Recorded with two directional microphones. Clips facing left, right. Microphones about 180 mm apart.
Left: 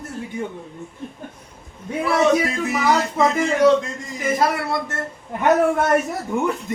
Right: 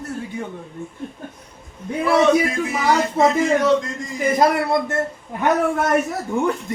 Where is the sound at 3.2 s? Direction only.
30° right (ahead or behind).